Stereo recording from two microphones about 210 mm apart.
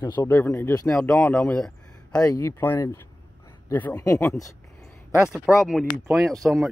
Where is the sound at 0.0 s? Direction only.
15° left (ahead or behind).